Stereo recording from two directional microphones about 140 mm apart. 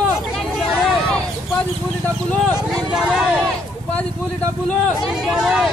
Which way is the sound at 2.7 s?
5° right (ahead or behind).